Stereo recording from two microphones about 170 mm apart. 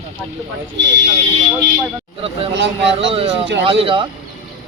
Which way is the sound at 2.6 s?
90° right.